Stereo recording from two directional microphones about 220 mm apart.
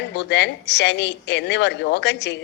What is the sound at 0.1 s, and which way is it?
A man's voice, 50° left (ahead or behind).